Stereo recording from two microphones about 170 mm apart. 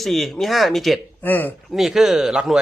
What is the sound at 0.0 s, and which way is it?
Speech, centre (ahead or behind).